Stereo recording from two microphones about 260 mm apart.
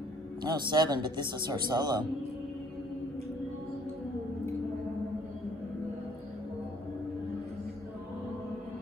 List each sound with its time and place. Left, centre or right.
0.4 s a man's voice: centre